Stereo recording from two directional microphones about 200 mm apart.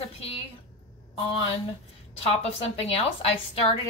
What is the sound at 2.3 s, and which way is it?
Speech, 30° left (ahead or behind).